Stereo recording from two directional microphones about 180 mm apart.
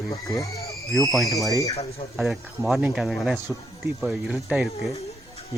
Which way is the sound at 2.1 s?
Centre (ahead or behind).